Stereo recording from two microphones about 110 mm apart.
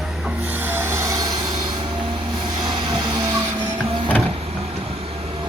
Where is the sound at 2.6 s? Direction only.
40° right (ahead or behind).